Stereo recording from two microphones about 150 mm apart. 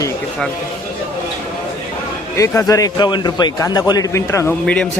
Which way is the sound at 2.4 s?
20° left (ahead or behind).